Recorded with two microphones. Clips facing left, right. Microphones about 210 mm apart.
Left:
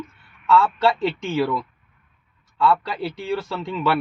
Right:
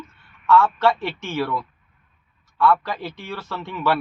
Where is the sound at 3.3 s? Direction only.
15° left (ahead or behind).